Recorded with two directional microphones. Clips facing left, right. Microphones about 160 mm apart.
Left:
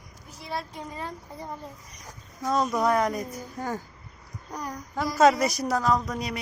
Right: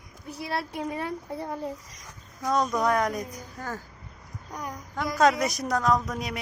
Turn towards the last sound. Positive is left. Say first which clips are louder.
# even
turn(degrees=0)  # may be behind; listen again after turning